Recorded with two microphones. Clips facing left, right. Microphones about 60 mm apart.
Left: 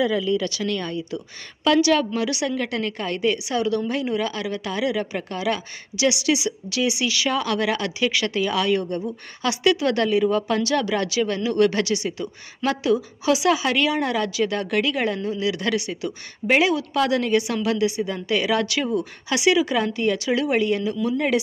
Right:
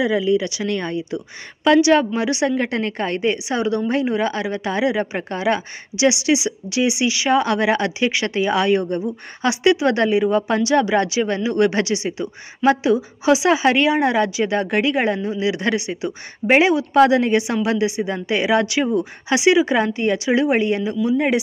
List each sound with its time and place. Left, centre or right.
0.0 s a woman's voice: centre